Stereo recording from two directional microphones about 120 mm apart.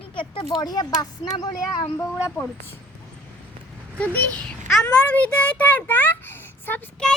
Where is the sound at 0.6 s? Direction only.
35° left (ahead or behind).